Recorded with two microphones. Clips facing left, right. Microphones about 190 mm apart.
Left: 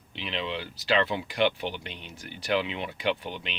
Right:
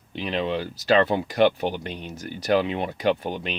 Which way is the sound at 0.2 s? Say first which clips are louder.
Right 7 dB; 45° right (ahead or behind).